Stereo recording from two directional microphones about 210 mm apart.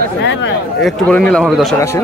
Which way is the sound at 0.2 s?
60° left (ahead or behind).